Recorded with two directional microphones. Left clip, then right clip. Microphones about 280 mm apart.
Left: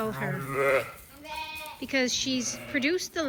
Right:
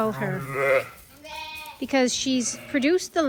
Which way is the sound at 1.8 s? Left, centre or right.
Centre.